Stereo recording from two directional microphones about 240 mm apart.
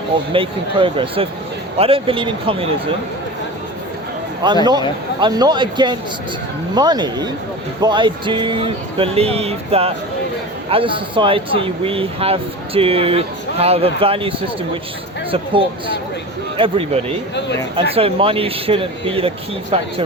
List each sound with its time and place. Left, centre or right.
0.3 s speech: right
4.4 s speech: centre